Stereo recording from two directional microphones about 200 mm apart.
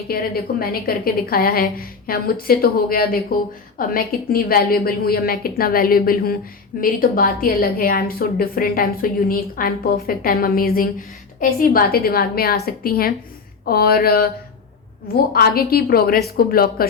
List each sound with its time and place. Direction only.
0.1 s a woman's voice: 50° left (ahead or behind)